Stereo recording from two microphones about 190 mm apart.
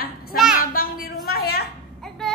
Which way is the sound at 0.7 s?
50° left (ahead or behind).